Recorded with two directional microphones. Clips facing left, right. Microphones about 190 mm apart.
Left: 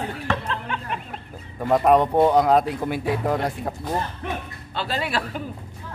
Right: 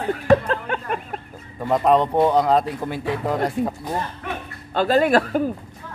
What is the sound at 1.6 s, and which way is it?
Speech, 5° left (ahead or behind).